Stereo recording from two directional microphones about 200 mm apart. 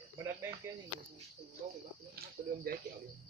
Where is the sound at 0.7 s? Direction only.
15° right (ahead or behind).